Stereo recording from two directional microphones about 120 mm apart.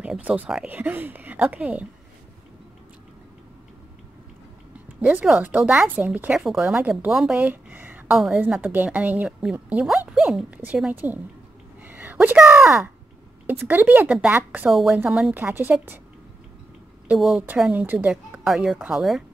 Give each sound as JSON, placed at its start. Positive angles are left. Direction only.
{"t": 0.0, "sound": "speech", "side_deg": -10}
{"t": 5.0, "sound": "speech", "side_deg": -10}
{"t": 8.1, "sound": "speech", "side_deg": 0}
{"t": 8.4, "sound": "speech", "side_deg": -15}
{"t": 14.7, "sound": "speech", "side_deg": 0}
{"t": 15.3, "sound": "speech", "side_deg": -15}
{"t": 17.1, "sound": "speech", "side_deg": -5}
{"t": 18.1, "sound": "speech", "side_deg": 0}